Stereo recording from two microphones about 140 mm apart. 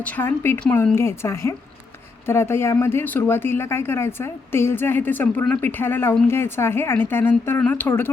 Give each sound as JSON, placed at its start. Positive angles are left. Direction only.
{"t": 0.0, "sound": "a woman's voice", "side_deg": 15}